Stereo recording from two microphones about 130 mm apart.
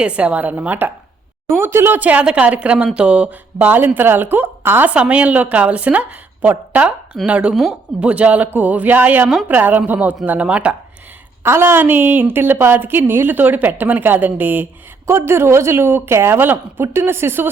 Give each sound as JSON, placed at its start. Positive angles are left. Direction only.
{"t": 0.0, "sound": "a woman's voice", "side_deg": -10}